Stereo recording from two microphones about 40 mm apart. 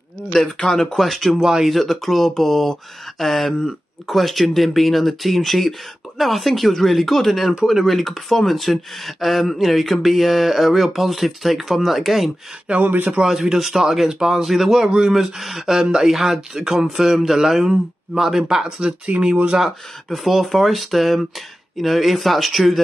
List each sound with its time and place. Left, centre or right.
0.3 s speech: centre
1.4 s speech: centre
1.7 s speech: centre
12.8 s a man's voice: right
13.2 s speech: centre
17.1 s speech: centre; by 19.5 s right
20.1 s speech: centre